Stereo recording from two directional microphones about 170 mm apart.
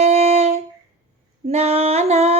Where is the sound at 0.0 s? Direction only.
40° right (ahead or behind).